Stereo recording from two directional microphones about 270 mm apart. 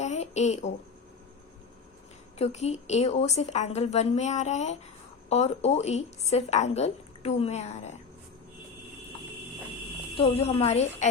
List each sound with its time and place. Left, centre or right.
0.0 s a sound: left
2.4 s a woman's voice: left
10.2 s a woman's voice: left